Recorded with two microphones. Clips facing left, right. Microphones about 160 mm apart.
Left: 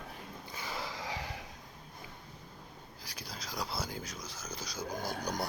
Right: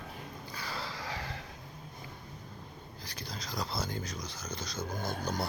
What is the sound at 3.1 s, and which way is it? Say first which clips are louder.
Speech: right 2 dB; 10° left (ahead or behind).